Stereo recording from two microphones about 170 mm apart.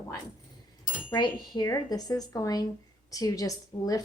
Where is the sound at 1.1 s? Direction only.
25° left (ahead or behind).